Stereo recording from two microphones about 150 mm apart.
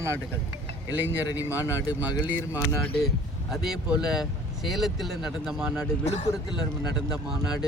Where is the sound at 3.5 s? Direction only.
5° right (ahead or behind).